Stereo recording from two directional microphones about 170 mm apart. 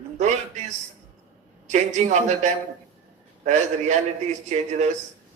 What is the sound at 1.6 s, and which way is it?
A man's voice, 40° right (ahead or behind).